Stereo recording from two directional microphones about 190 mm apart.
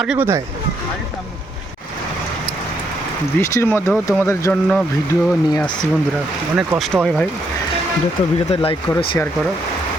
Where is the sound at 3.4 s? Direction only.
15° left (ahead or behind).